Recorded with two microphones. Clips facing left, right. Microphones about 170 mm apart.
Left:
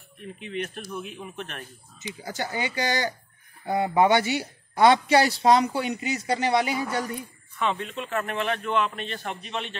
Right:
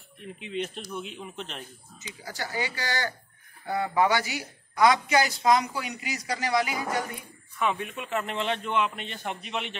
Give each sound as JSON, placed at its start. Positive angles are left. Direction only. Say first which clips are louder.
{"t": 0.4, "sound": "speech", "louder": "even", "side_deg": -20}
{"t": 2.2, "sound": "a woman's voice", "louder": "left 2 dB", "side_deg": 20}
{"t": 7.5, "sound": "a man's voice", "louder": "left 1 dB", "side_deg": -10}